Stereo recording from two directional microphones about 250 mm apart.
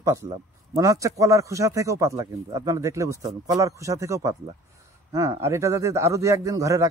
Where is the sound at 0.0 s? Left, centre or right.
Centre.